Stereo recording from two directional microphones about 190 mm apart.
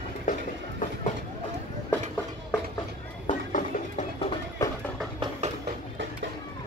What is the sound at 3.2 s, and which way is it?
Horse, 40° left (ahead or behind).